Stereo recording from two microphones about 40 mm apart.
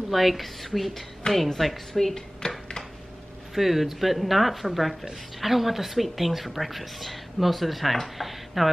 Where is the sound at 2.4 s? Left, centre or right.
Centre.